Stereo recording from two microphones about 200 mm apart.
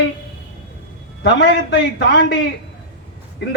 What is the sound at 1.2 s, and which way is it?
A man's voice, 60° left (ahead or behind).